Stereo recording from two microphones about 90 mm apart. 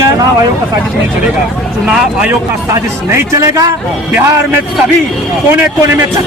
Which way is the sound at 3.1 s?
40° right (ahead or behind).